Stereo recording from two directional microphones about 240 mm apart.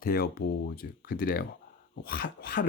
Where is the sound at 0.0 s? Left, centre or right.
Left.